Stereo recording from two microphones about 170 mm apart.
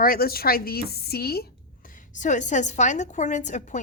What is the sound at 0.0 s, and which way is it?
Speech, 60° left (ahead or behind).